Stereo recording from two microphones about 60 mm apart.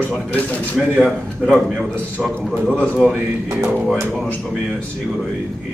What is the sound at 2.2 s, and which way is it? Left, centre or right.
Speech, centre.